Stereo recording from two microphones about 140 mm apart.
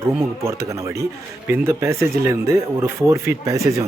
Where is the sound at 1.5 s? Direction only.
20° right (ahead or behind).